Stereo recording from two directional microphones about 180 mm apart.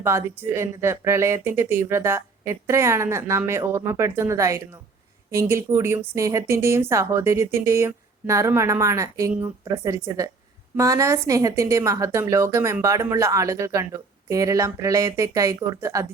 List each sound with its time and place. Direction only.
0.0 s speech: 15° right (ahead or behind)